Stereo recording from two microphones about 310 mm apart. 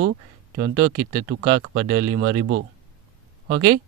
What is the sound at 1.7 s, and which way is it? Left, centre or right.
Speech, centre.